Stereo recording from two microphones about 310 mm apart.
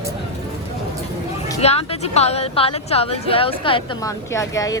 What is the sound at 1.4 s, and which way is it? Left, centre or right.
A woman's voice, centre.